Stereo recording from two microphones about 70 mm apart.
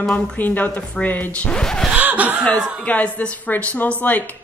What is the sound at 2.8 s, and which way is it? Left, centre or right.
Speech, left.